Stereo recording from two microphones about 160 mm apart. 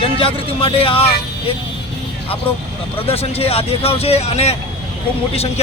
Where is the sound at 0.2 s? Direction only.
35° left (ahead or behind).